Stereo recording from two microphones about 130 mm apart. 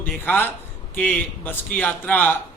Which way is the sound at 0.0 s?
15° left (ahead or behind).